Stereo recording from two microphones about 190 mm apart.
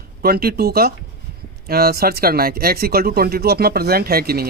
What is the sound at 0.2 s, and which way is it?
Speech, 50° right (ahead or behind).